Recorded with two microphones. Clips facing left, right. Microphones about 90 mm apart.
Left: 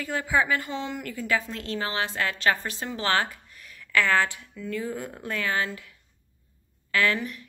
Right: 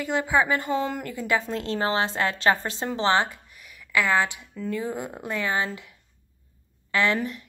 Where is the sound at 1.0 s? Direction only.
25° right (ahead or behind).